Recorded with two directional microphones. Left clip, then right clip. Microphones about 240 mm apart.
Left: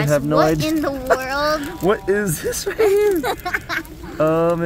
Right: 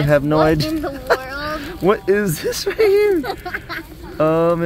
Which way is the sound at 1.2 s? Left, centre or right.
Left.